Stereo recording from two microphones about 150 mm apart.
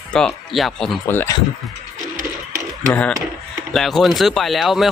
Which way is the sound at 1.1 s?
15° left (ahead or behind).